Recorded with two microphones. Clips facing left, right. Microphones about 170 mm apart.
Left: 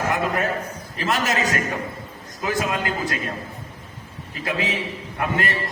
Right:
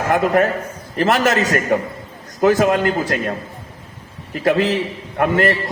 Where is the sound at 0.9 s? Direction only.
65° right (ahead or behind).